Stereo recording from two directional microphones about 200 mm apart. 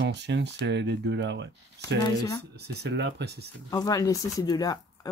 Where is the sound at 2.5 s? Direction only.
55° right (ahead or behind).